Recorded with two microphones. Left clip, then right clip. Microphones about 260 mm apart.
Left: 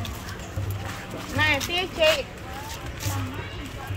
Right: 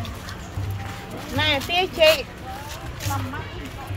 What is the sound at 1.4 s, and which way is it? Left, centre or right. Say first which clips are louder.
Speech: right 2 dB; right.